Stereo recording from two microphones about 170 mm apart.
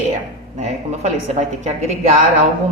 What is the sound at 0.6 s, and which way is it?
A woman's voice, 40° right (ahead or behind).